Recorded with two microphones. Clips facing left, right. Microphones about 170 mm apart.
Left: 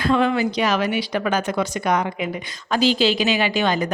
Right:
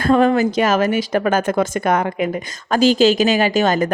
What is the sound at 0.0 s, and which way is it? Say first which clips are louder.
A woman's voice: right 5 dB; 45° right (ahead or behind).